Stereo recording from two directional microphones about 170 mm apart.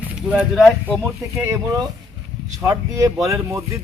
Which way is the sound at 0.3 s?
5° right (ahead or behind).